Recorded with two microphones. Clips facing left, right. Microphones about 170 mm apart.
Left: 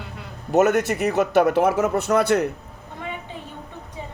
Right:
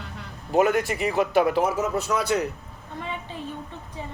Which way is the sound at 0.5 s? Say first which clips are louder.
Left 3 dB; 45° left (ahead or behind).